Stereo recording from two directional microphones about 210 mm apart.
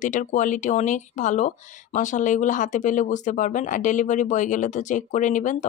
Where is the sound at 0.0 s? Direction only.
35° left (ahead or behind).